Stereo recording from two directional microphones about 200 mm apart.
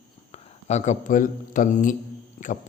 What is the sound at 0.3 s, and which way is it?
A man's voice, 35° left (ahead or behind).